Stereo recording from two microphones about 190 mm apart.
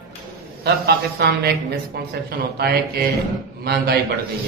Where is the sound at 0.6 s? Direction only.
60° right (ahead or behind).